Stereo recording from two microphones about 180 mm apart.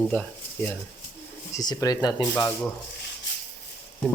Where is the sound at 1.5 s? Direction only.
20° left (ahead or behind).